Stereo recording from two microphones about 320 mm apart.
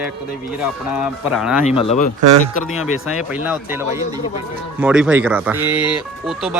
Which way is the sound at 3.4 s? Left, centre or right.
Centre.